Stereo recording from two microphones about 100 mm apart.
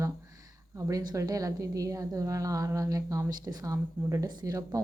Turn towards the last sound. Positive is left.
turn(degrees=-35)  # may be behind; listen again after turning